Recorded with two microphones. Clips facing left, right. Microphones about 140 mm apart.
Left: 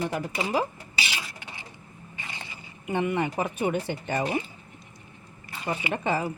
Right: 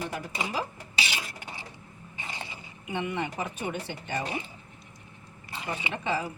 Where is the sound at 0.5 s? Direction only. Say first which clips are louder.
Left 7 dB; 50° left (ahead or behind).